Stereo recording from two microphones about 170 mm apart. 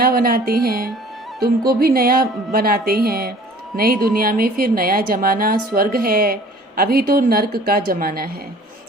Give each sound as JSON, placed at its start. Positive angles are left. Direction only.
{"t": 0.0, "sound": "a woman's voice", "side_deg": -60}